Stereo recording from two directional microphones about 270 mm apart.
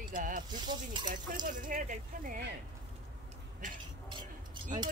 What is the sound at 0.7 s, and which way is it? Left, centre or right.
Speech, centre.